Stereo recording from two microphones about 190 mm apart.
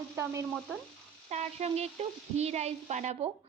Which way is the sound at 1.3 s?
35° right (ahead or behind).